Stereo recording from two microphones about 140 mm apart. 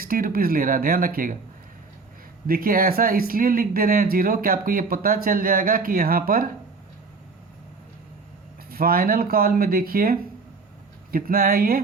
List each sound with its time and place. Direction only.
0.0 s speech: 90° right
2.5 s speech: 90° right
8.7 s speech: 90° right